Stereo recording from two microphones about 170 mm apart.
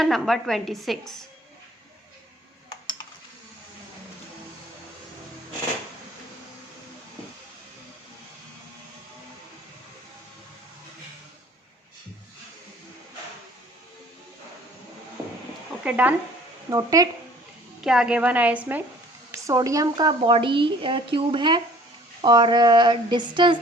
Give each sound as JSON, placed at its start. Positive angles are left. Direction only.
{"t": 0.0, "sound": "a woman's voice", "side_deg": 0}
{"t": 15.8, "sound": "a sound", "side_deg": -10}
{"t": 16.6, "sound": "a woman's voice", "side_deg": -20}
{"t": 17.8, "sound": "a woman's voice", "side_deg": -5}
{"t": 19.3, "sound": "a woman's voice", "side_deg": -20}